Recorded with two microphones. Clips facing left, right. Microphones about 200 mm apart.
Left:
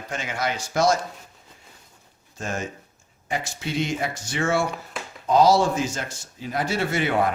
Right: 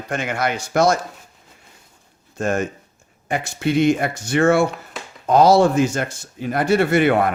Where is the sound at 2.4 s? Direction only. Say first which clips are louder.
Right 9 dB; 60° right (ahead or behind).